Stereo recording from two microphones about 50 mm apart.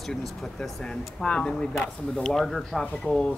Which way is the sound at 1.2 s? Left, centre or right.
Centre.